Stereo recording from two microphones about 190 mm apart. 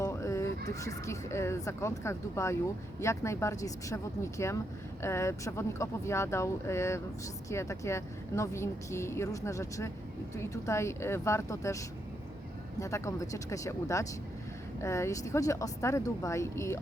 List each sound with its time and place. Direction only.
0.0 s a sound: 15° left (ahead or behind)
0.7 s speech: 15° left (ahead or behind)
12.8 s speech: 15° left (ahead or behind)